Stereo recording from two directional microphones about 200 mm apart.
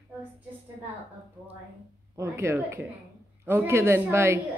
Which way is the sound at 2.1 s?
15° right (ahead or behind).